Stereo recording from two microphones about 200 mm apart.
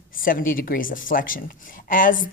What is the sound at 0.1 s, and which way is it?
Speech, 45° left (ahead or behind).